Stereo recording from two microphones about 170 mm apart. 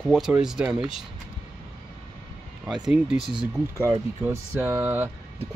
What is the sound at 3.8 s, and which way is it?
Speech, 15° right (ahead or behind).